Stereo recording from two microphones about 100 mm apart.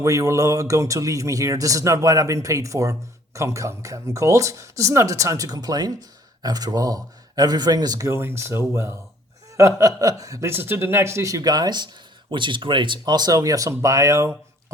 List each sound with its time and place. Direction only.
0.0 s speech: 35° right (ahead or behind)
8.1 s speech: 25° right (ahead or behind)
10.5 s speech: 20° right (ahead or behind)